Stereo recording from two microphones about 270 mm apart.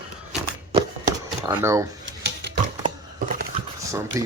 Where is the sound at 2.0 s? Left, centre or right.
Right.